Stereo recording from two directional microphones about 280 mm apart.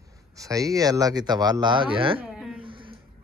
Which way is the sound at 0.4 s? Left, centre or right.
Centre.